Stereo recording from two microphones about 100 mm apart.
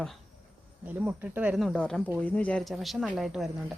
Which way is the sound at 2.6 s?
Centre (ahead or behind).